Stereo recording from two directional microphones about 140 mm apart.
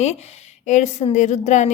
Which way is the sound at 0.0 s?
50° left (ahead or behind).